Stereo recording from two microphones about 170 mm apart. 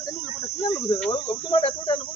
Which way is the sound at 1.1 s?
30° left (ahead or behind).